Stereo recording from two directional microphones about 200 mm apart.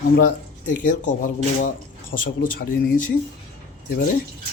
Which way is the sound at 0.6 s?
40° left (ahead or behind).